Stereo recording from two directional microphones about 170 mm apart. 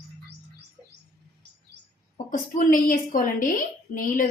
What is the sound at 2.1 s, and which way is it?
A woman's voice, 50° left (ahead or behind).